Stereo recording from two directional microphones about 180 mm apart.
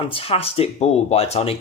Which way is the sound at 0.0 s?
30° left (ahead or behind).